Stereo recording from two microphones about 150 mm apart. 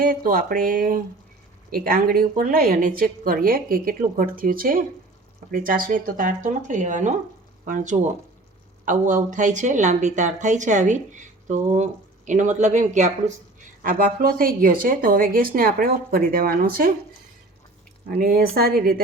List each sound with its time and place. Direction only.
0.1 s a woman's voice: 70° right (ahead or behind); by 13.3 s 55° right (ahead or behind)
13.8 s a woman's voice: 70° right (ahead or behind)
18.1 s speech: 80° right